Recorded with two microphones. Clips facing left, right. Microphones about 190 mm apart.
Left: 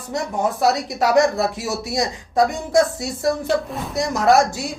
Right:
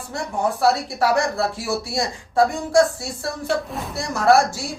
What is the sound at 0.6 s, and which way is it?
Speech, 20° left (ahead or behind).